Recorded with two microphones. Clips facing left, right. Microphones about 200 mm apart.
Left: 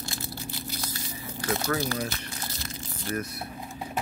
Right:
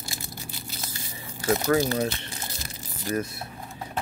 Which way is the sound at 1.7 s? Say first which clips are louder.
Right 7 dB; 15° right (ahead or behind).